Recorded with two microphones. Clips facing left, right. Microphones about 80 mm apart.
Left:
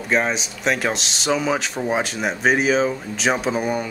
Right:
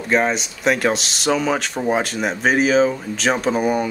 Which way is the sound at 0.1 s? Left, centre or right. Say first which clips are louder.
Right 2 dB; centre.